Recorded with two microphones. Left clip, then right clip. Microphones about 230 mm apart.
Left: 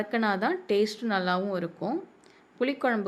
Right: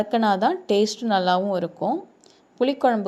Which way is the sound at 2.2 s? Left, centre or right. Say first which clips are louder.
Right 7 dB; centre.